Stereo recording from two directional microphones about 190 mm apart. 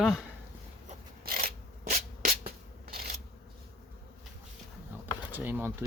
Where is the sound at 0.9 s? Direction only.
45° right (ahead or behind).